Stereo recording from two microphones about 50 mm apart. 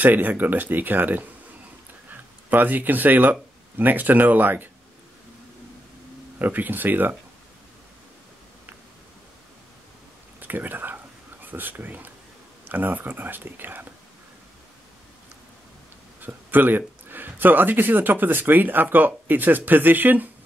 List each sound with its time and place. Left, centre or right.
0.0 s a man's voice: right
6.4 s a man's voice: right
10.4 s a man's voice: right
16.2 s a man's voice: right